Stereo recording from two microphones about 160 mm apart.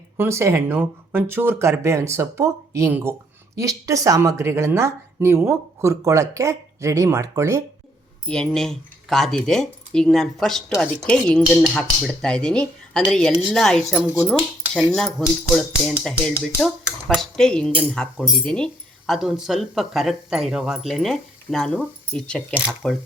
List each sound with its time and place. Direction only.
0.2 s speech: 15° right (ahead or behind)
8.3 s speech: 5° left (ahead or behind)
15.2 s speech: 5° left (ahead or behind)